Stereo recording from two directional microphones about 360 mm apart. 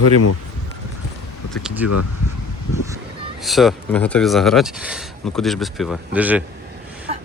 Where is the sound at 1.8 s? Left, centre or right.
Left.